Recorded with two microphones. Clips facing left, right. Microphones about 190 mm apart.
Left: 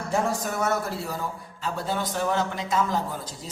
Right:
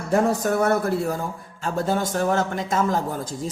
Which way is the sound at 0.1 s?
60° right (ahead or behind).